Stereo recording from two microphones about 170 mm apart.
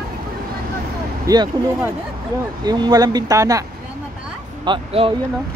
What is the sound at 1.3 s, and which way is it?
Speech, 20° right (ahead or behind).